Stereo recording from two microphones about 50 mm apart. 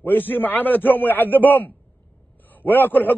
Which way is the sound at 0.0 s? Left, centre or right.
Left.